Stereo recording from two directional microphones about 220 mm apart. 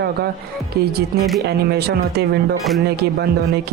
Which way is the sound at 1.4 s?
45° right (ahead or behind).